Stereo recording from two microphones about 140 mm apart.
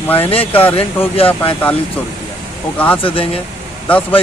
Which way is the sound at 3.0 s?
40° left (ahead or behind).